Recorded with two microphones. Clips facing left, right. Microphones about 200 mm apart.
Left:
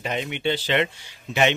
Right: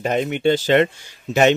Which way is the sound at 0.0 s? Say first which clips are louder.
Right 7 dB; 45° right (ahead or behind).